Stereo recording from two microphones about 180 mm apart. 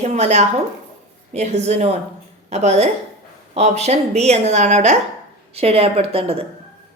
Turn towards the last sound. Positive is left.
turn(degrees=-30)  # may be behind; listen again after turning